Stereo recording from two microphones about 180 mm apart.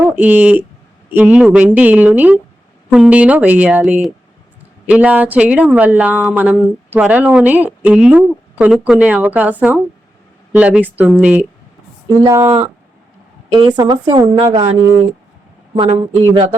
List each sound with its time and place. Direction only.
0.0 s speech: 10° right (ahead or behind)
13.7 s a woman's voice: 25° right (ahead or behind)
15.7 s a woman's voice: 30° right (ahead or behind)